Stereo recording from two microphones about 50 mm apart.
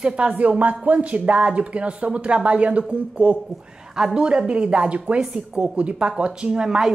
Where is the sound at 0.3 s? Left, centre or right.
Right.